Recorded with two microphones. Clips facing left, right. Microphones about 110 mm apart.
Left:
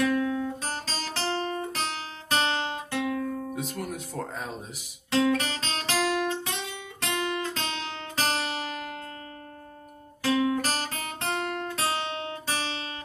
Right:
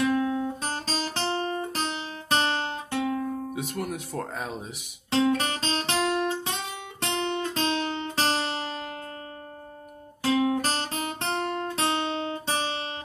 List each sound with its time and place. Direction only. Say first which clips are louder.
0.0 s guitar: right 1 dB; 30° right (ahead or behind)
3.7 s speech: right 2 dB; centre (ahead or behind)
5.1 s guitar: right 1 dB; 30° right (ahead or behind)
8.2 s music: right 1 dB; 30° right (ahead or behind)
10.2 s guitar: right 1 dB; 30° right (ahead or behind)